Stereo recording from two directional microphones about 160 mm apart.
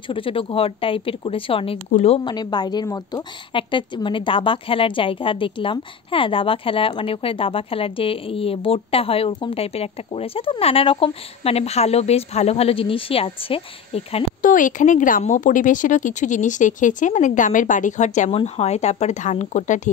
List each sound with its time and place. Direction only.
0.1 s a woman's voice: 35° left (ahead or behind)
2.3 s a woman's voice: 25° left (ahead or behind)
14.4 s speech: 55° left (ahead or behind)